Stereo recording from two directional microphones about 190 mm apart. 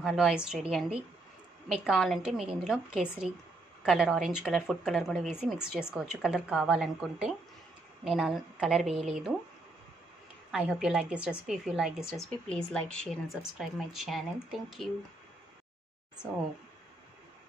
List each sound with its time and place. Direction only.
0.0 s a woman's voice: centre (ahead or behind)
10.5 s a woman's voice: 5° right (ahead or behind)